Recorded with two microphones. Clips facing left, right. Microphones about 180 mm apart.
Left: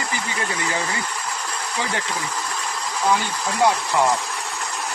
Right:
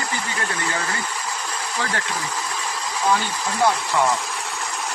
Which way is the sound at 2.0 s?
Centre (ahead or behind).